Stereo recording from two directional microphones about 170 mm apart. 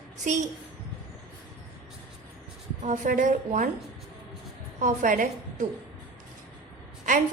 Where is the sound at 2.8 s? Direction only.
45° right (ahead or behind).